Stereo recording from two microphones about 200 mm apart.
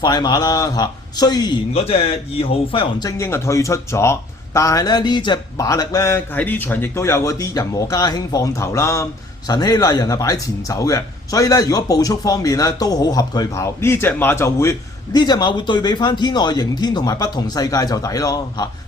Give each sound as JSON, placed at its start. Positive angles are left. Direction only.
{"t": 0.0, "sound": "a man's voice", "side_deg": 20}